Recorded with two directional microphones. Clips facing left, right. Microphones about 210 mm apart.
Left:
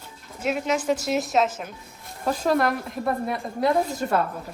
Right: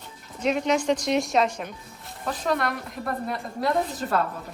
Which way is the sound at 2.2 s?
45° left (ahead or behind).